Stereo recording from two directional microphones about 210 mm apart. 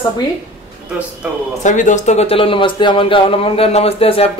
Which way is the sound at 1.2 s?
5° right (ahead or behind).